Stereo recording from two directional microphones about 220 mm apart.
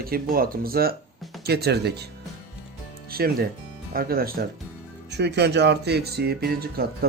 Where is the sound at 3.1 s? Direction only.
45° right (ahead or behind).